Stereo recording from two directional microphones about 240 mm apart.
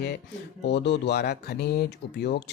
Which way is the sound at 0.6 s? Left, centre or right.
Left.